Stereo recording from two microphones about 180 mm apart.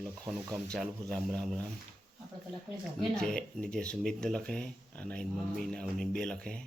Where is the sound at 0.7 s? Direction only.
5° left (ahead or behind).